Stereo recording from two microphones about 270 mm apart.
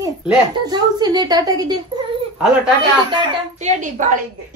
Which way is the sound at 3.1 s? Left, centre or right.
Right.